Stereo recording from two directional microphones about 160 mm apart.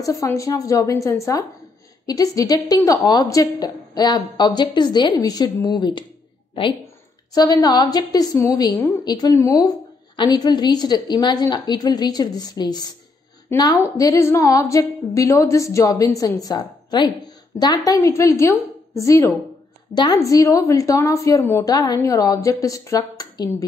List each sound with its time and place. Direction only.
0.0 s a woman's voice: 20° left (ahead or behind)
7.3 s a woman's voice: 25° left (ahead or behind)